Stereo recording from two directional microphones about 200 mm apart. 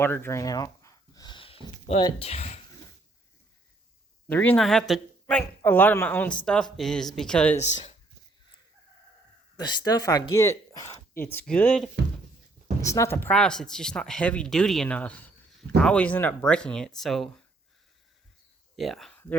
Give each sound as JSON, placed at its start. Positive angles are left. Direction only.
{"t": 0.0, "sound": "speech", "side_deg": 10}
{"t": 4.3, "sound": "speech", "side_deg": 10}
{"t": 7.5, "sound": "speech", "side_deg": 30}
{"t": 9.6, "sound": "speech", "side_deg": 20}
{"t": 18.8, "sound": "speech", "side_deg": 0}